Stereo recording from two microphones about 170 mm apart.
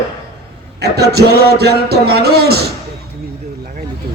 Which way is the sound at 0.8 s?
70° right (ahead or behind).